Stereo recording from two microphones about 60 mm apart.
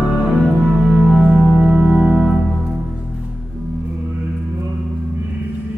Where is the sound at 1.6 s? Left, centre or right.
Centre.